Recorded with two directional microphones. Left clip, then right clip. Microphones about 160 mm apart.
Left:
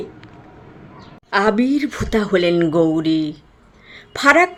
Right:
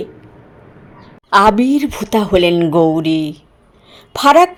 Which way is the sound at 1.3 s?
25° right (ahead or behind).